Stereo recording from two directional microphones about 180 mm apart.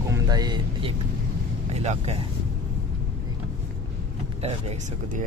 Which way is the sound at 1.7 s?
35° right (ahead or behind).